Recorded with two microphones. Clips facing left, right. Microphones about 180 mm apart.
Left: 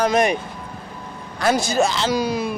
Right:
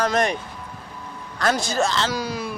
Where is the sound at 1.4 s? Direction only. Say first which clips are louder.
Left 3 dB; 10° left (ahead or behind).